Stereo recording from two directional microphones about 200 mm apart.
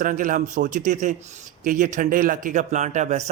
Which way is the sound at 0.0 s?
40° right (ahead or behind).